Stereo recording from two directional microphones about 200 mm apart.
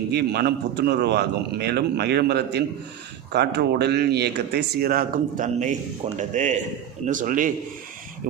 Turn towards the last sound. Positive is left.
turn(degrees=-40)  # may be behind; listen again after turning